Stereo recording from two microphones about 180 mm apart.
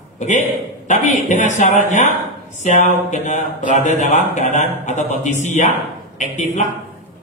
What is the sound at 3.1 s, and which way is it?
Speech, 40° left (ahead or behind).